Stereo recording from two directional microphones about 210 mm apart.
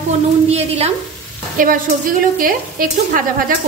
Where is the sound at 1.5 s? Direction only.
40° right (ahead or behind).